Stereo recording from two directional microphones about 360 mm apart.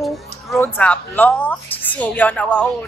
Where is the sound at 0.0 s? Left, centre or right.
Centre.